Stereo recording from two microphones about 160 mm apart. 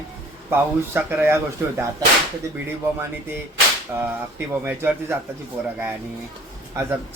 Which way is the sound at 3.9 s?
20° right (ahead or behind).